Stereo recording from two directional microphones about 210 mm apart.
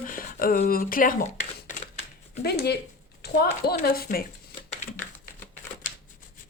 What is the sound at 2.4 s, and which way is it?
Speech, 50° left (ahead or behind).